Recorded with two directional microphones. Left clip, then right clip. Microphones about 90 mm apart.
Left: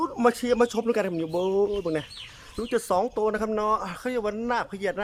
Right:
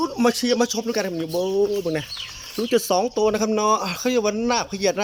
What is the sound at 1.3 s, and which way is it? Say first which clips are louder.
Speech: right 4 dB; 25° left (ahead or behind).